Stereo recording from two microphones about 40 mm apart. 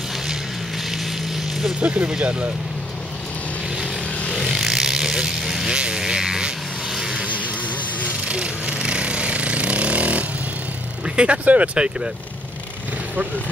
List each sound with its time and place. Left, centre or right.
1.8 s speech: right
4.6 s vehicle: centre
5.7 s vehicle: right
8.3 s a sound: right
11.1 s speech: right